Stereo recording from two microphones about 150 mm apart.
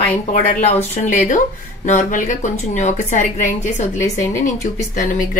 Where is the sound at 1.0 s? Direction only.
55° left (ahead or behind).